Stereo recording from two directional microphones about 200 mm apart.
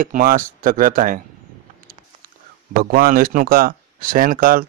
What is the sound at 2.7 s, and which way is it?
Speech, 45° right (ahead or behind).